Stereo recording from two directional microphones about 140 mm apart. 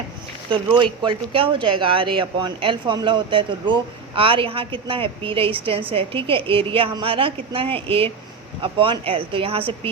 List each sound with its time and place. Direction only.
0.5 s speech: 35° right (ahead or behind)